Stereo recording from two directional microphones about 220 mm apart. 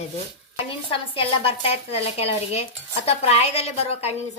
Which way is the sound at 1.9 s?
25° left (ahead or behind).